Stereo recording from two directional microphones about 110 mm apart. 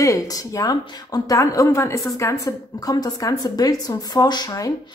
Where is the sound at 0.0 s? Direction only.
30° left (ahead or behind).